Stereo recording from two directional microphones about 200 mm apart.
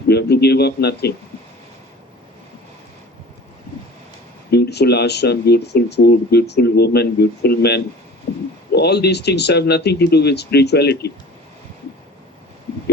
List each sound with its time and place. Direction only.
0.1 s a man's voice: 55° left (ahead or behind)
4.5 s speech: 55° left (ahead or behind)
8.3 s a sound: 50° left (ahead or behind)
8.7 s speech: 55° left (ahead or behind)